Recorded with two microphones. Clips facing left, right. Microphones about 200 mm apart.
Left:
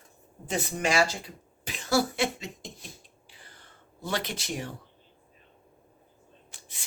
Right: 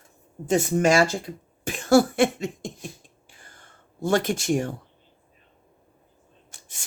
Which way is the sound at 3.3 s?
50° right (ahead or behind).